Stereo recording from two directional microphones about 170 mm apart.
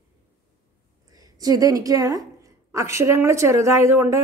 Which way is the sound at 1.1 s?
20° right (ahead or behind).